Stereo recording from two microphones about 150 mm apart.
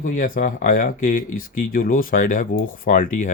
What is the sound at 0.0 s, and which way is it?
Speech, 60° left (ahead or behind).